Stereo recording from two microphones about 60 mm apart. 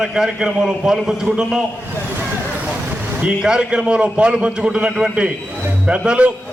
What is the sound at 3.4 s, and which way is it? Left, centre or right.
A man's voice, centre.